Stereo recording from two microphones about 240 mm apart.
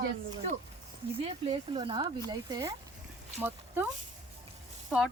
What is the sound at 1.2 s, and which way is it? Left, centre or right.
Speech, right.